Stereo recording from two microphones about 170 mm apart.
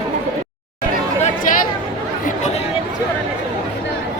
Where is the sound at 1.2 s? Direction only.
50° left (ahead or behind).